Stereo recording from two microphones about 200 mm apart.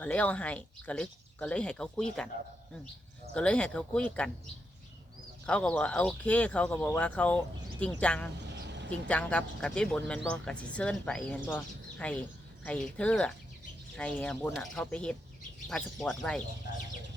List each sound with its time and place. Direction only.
0.0 s speech: 5° left (ahead or behind)
3.3 s speech: 5° left (ahead or behind)
5.5 s speech: 5° left (ahead or behind)
8.6 s vehicle: 60° right (ahead or behind)
8.9 s speech: 5° left (ahead or behind)